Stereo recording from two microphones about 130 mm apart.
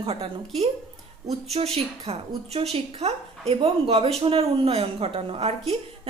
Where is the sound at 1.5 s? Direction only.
50° right (ahead or behind).